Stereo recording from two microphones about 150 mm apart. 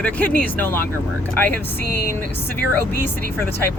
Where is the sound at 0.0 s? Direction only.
10° left (ahead or behind).